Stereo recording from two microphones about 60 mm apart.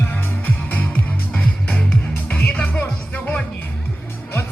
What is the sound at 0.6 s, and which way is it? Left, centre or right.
Music, left.